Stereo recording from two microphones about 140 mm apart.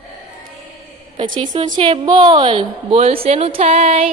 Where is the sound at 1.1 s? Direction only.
35° right (ahead or behind).